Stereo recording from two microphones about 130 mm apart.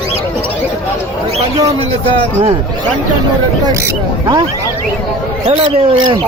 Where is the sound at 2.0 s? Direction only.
45° right (ahead or behind).